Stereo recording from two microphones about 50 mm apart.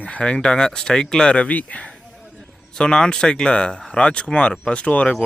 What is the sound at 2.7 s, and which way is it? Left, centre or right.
Speech, centre.